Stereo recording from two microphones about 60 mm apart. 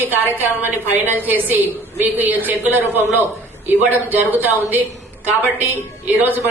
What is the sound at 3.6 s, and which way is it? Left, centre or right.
Speech, right.